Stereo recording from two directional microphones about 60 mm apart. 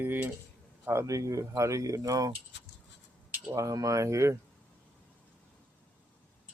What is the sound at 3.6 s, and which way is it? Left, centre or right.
Speech, right.